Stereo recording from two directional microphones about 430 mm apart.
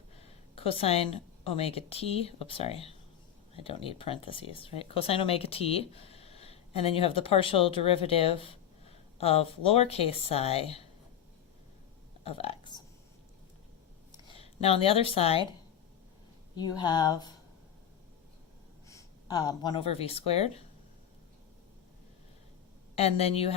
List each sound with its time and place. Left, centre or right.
0.2 s a woman's voice: centre
12.2 s speech: centre
14.1 s speech: centre
16.6 s speech: centre
18.9 s speech: centre
23.0 s speech: centre